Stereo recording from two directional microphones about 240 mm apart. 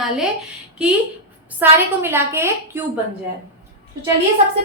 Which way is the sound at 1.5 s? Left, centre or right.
Centre.